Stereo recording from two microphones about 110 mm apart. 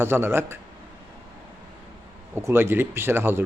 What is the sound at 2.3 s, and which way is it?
Speech, 20° right (ahead or behind).